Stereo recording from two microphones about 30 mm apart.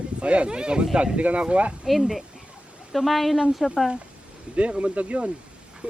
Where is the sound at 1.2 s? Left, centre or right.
Right.